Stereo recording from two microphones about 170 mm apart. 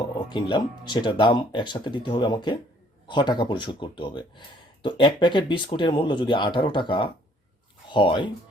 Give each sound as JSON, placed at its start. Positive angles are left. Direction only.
{"t": 0.0, "sound": "speech", "side_deg": 25}